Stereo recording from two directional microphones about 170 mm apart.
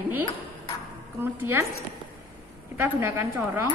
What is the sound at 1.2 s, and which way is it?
Speech, 15° right (ahead or behind).